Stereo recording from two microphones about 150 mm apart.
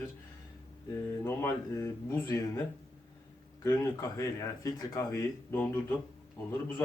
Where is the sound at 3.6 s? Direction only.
20° left (ahead or behind).